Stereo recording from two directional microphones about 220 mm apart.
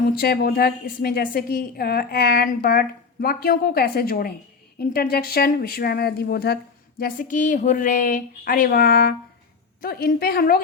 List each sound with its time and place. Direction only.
0.2 s a woman's voice: 45° left (ahead or behind)